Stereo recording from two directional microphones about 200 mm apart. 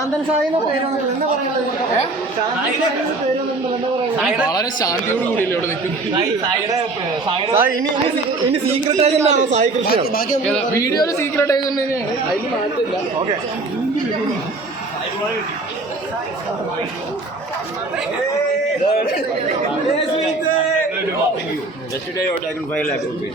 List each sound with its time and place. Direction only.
4.2 s speech: 5° right (ahead or behind)
4.4 s a woman's voice: 20° left (ahead or behind)
7.3 s speech: 25° right (ahead or behind)
8.6 s speech: 30° right (ahead or behind)
10.8 s a woman's voice: 15° left (ahead or behind)
22.7 s a woman's voice: 5° left (ahead or behind)